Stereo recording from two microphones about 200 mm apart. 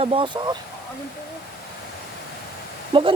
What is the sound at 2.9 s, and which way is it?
Speech, 25° right (ahead or behind).